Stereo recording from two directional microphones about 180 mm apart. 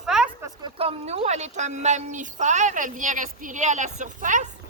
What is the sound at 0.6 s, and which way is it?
A woman's voice, 30° right (ahead or behind).